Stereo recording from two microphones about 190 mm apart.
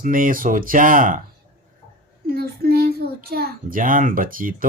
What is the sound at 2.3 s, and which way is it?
A child's voice, 55° right (ahead or behind).